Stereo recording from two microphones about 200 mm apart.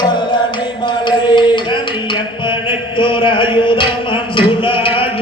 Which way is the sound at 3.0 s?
25° left (ahead or behind).